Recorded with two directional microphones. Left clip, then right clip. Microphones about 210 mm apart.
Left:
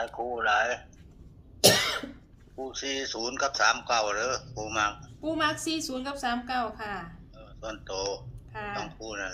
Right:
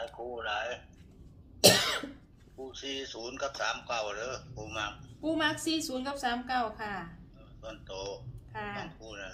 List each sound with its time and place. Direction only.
0.0 s speech: 50° left (ahead or behind)
1.6 s cough: 5° left (ahead or behind)
2.6 s speech: 50° left (ahead or behind)
5.2 s a woman's voice: 10° left (ahead or behind)
7.3 s a man's voice: 50° left (ahead or behind)